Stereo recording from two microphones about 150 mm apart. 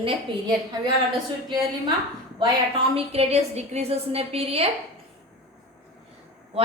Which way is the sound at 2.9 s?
40° right (ahead or behind).